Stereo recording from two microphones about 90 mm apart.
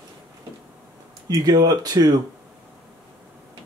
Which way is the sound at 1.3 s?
45° right (ahead or behind).